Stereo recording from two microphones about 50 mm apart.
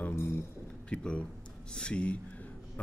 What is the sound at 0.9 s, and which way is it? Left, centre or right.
Speech, left.